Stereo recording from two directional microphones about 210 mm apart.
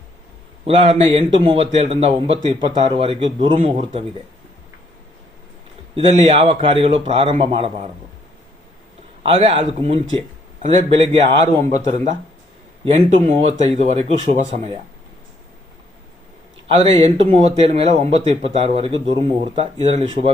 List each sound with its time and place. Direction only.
0.6 s speech: 25° right (ahead or behind)
6.1 s speech: 30° right (ahead or behind)
9.2 s speech: 30° right (ahead or behind)
16.6 s speech: 30° right (ahead or behind)